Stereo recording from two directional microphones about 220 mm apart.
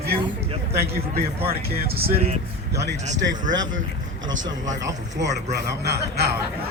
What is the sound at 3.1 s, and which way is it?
Speech, 55° right (ahead or behind).